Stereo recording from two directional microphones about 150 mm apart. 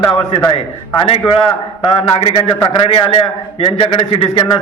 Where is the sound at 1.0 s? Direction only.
35° left (ahead or behind).